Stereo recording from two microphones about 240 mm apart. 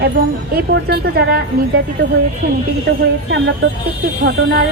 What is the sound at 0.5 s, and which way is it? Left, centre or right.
Speech, right.